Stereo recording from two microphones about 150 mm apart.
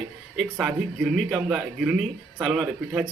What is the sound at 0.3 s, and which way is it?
A man's voice, 10° right (ahead or behind).